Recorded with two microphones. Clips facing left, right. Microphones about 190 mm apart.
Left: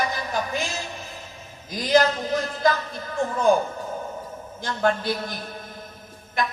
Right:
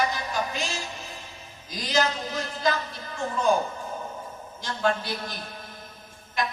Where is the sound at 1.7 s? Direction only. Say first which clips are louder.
Left 7 dB; 55° left (ahead or behind).